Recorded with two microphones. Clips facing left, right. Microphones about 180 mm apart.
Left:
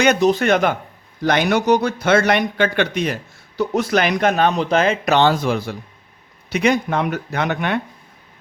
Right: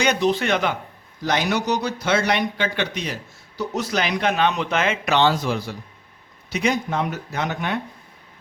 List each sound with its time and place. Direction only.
0.0 s speech: 50° left (ahead or behind); by 7.8 s 65° left (ahead or behind)